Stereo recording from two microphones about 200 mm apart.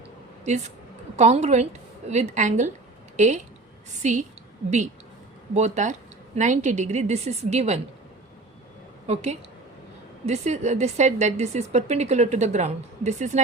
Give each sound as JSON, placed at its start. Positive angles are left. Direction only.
{"t": 0.4, "sound": "a woman's voice", "side_deg": -35}
{"t": 5.5, "sound": "a woman's voice", "side_deg": -35}
{"t": 9.0, "sound": "a woman's voice", "side_deg": -35}